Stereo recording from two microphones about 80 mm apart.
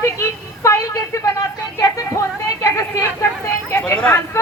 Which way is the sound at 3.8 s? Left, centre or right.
Centre.